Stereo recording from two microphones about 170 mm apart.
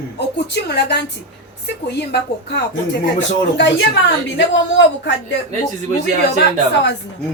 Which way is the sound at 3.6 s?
90° left.